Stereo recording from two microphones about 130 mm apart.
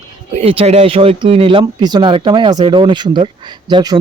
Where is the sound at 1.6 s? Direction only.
35° right (ahead or behind).